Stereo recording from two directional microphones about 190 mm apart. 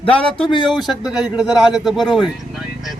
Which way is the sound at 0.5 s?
25° left (ahead or behind).